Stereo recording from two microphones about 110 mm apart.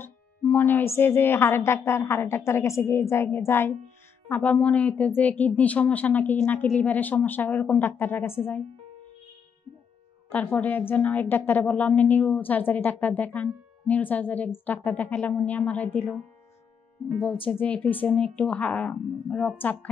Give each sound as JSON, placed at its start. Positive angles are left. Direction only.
{"t": 0.0, "sound": "a woman's voice", "side_deg": 15}
{"t": 4.3, "sound": "a woman's voice", "side_deg": 10}
{"t": 10.3, "sound": "a woman's voice", "side_deg": 15}
{"t": 17.5, "sound": "a woman's voice", "side_deg": 10}